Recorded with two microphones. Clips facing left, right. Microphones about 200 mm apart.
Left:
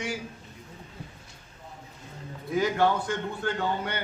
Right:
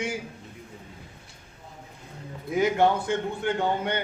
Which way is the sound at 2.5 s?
20° right (ahead or behind).